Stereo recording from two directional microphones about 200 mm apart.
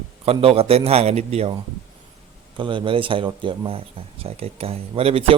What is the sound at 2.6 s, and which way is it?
A man's voice, 25° right (ahead or behind).